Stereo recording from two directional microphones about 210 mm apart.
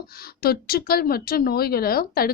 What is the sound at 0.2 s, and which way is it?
Speech, 45° left (ahead or behind).